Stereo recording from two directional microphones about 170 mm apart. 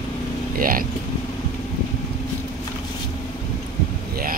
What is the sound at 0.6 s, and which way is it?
Speech, 55° right (ahead or behind).